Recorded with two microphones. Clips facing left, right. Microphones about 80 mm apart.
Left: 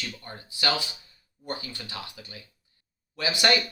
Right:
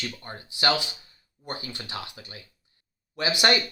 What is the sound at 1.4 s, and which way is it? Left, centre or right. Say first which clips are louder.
Speech: even; right.